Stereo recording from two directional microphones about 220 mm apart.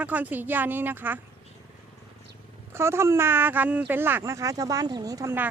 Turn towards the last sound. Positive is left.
turn(degrees=-10)  # may be behind; listen again after turning